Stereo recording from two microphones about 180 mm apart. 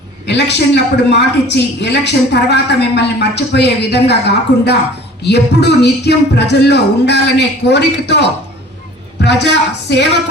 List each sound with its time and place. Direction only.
0.3 s a man's voice: 70° left (ahead or behind)
9.2 s a man's voice: 70° left (ahead or behind)